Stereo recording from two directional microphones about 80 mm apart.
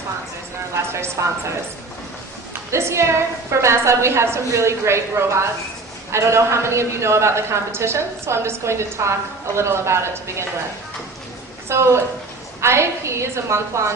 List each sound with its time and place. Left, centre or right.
0.9 s speech: right
2.7 s a woman's voice: right
11.7 s a woman's voice: right